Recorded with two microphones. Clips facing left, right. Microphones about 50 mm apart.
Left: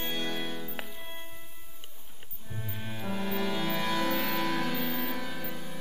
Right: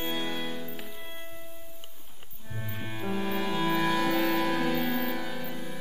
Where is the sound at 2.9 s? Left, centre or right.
Centre.